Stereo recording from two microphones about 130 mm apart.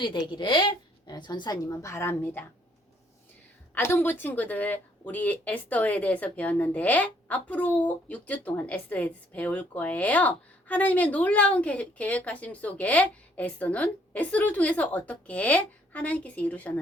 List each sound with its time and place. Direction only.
0.3 s a woman's voice: 40° left (ahead or behind); by 2.4 s 15° left (ahead or behind)
3.8 s speech: 15° left (ahead or behind)